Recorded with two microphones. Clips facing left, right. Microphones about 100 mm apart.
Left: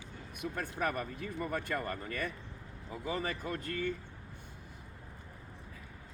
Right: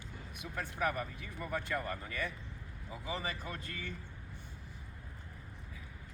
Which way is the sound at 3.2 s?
50° left (ahead or behind).